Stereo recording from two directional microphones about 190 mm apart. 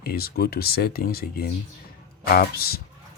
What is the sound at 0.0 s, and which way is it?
Speech, 55° left (ahead or behind).